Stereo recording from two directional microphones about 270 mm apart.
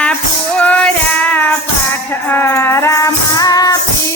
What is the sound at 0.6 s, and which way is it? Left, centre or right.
Child singing, centre.